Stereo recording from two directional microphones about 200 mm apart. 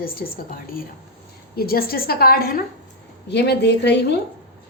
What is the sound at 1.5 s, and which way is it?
A woman's voice, 50° left (ahead or behind).